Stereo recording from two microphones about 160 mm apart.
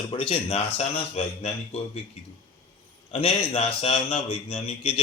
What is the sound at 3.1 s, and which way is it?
Speech, 40° left (ahead or behind).